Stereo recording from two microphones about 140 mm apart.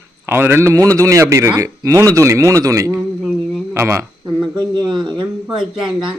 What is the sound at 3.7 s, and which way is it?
Speech, 20° right (ahead or behind).